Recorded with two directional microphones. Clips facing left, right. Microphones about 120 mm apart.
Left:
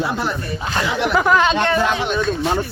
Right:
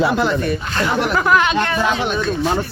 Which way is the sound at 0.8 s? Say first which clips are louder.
Right 2 dB; 50° right (ahead or behind).